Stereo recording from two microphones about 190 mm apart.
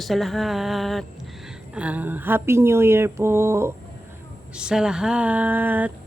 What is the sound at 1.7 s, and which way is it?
Speech, 5° right (ahead or behind).